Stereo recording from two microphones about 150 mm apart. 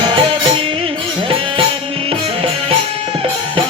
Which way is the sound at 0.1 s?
35° right (ahead or behind).